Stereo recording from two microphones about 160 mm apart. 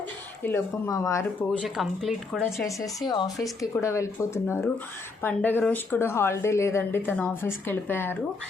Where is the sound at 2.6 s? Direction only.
20° left (ahead or behind).